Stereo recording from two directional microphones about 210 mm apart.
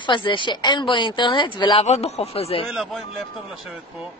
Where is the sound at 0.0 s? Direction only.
20° left (ahead or behind).